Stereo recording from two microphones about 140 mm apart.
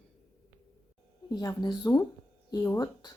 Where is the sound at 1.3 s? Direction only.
30° left (ahead or behind).